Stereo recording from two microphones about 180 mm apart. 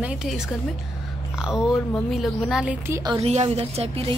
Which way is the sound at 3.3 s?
35° right (ahead or behind).